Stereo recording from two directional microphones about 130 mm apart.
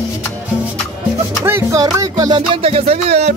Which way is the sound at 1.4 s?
20° right (ahead or behind).